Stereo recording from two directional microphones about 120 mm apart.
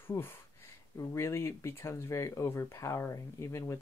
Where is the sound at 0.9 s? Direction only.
25° left (ahead or behind).